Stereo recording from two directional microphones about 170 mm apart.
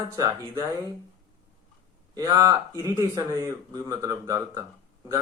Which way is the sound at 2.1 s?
20° right (ahead or behind).